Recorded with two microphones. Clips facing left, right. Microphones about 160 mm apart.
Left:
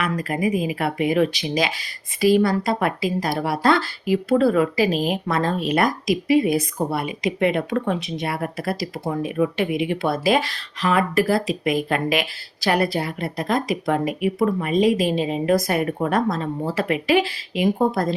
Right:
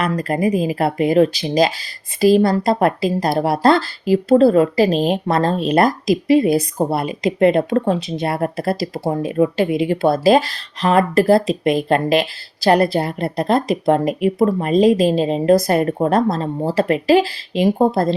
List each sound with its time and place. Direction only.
0.0 s a woman's voice: 35° right (ahead or behind)
14.0 s speech: 10° left (ahead or behind)
14.3 s a woman's voice: 35° right (ahead or behind)